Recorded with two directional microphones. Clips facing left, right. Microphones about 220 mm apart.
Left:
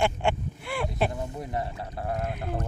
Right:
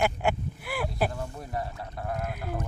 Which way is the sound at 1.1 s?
20° left (ahead or behind).